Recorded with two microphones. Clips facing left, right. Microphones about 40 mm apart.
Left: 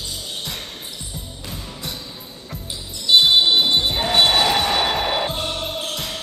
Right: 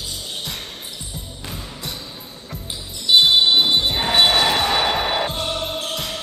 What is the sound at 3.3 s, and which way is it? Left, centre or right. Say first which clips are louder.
Music: even; centre.